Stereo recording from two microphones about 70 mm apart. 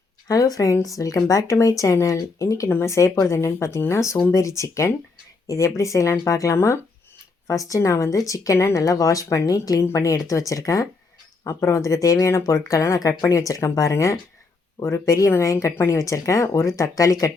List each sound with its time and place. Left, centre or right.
0.3 s speech: left
2.6 s speech: left
2.9 s speech: left
14.8 s speech: left
15.0 s speech: left